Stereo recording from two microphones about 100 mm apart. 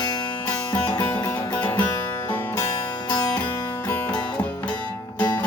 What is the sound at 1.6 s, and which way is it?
Music, 15° left (ahead or behind).